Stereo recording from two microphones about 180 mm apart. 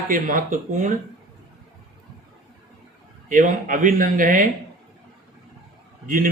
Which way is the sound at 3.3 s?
45° right (ahead or behind).